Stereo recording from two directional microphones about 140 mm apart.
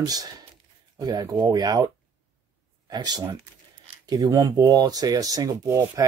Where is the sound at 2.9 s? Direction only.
30° right (ahead or behind).